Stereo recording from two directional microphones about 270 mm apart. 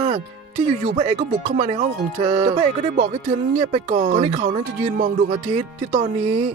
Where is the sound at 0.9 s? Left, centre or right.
Right.